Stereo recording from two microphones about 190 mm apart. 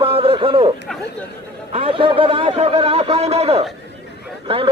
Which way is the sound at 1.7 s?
30° right (ahead or behind).